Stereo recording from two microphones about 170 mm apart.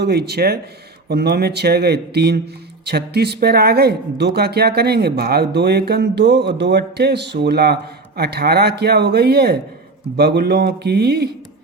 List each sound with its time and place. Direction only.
0.0 s speech: 70° right (ahead or behind)